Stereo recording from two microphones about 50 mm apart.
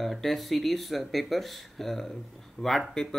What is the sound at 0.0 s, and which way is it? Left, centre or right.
Speech, centre.